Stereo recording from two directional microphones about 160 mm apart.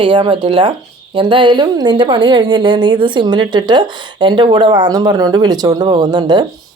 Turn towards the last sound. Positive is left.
turn(degrees=-25)  # may be behind; listen again after turning